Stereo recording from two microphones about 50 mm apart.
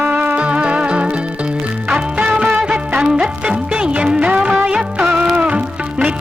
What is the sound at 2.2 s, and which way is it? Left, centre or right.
Music of bollywood, right.